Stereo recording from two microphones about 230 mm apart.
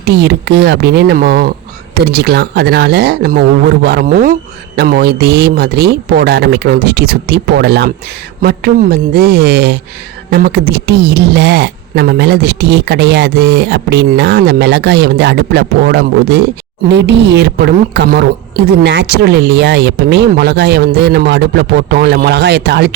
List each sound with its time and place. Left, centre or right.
0.0 s speech: right